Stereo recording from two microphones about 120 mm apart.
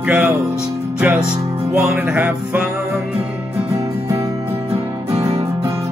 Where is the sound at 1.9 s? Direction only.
15° right (ahead or behind).